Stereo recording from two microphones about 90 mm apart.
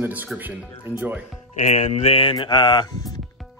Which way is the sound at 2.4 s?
60° left (ahead or behind).